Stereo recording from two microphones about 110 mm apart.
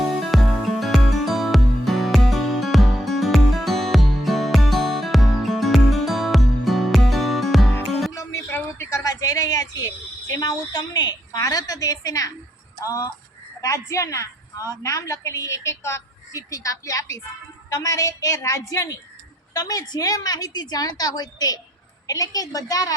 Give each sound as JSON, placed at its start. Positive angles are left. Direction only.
{"t": 0.1, "sound": "music", "side_deg": 0}
{"t": 8.1, "sound": "a sound", "side_deg": 30}
{"t": 12.8, "sound": "a woman's voice", "side_deg": 30}